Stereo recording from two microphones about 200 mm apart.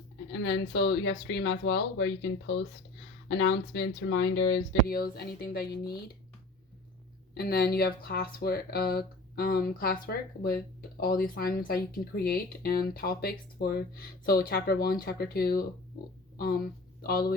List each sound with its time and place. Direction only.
0.3 s speech: 60° left (ahead or behind)
7.3 s speech: 50° left (ahead or behind)
17.0 s speech: 50° left (ahead or behind)